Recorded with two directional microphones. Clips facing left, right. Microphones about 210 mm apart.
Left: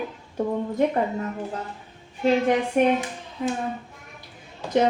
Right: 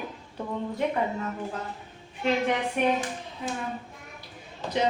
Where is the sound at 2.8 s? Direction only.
45° left (ahead or behind).